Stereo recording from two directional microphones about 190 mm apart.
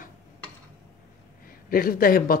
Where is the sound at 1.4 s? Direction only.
50° left (ahead or behind).